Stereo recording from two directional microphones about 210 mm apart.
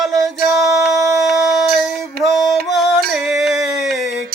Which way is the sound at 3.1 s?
Centre (ahead or behind).